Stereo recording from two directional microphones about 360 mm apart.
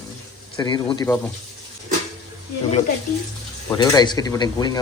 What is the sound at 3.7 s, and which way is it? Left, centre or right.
Speech, centre.